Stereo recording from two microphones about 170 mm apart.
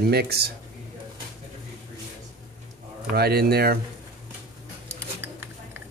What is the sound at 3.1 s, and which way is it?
Speech, 65° right (ahead or behind).